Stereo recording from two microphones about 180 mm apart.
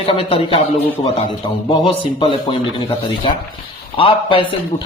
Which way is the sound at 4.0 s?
30° left (ahead or behind).